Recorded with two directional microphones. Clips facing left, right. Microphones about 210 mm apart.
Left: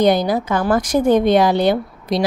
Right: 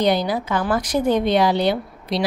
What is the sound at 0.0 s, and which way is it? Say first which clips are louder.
A woman's voice: left 4 dB; 45° left (ahead or behind).